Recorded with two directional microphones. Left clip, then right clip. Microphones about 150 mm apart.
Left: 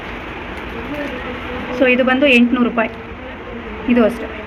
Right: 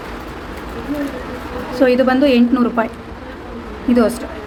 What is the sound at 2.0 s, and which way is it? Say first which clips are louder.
Speech: left 1 dB; 15° right (ahead or behind).